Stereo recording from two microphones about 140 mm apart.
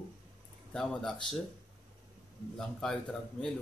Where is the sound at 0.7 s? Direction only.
5° left (ahead or behind).